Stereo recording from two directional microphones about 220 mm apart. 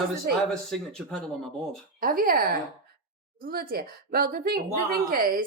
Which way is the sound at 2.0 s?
40° right (ahead or behind).